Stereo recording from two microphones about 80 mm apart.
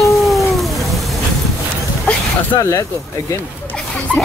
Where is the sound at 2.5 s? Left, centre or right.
Left.